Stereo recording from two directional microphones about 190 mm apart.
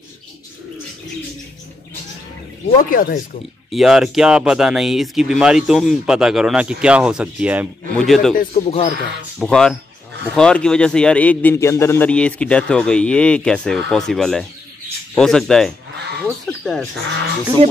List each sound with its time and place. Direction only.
2.8 s speech: 50° left (ahead or behind)
3.7 s a man's voice: centre (ahead or behind)
8.4 s speech: 35° left (ahead or behind)
9.4 s a man's voice: 5° left (ahead or behind)
17.6 s music: 30° right (ahead or behind)